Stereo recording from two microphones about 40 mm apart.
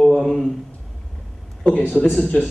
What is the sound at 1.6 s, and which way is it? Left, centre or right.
Speech, left.